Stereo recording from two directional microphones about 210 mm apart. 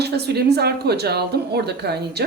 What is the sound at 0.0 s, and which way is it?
Speech, 50° right (ahead or behind).